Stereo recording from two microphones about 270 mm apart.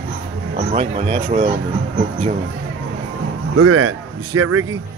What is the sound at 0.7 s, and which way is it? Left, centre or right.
Speech, right.